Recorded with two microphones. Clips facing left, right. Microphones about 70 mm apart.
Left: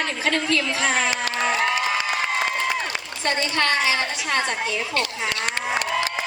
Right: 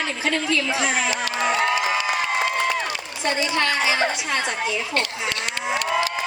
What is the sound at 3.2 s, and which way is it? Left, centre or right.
Speech, centre.